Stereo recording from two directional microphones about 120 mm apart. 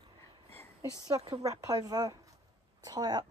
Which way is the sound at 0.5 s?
25° left (ahead or behind).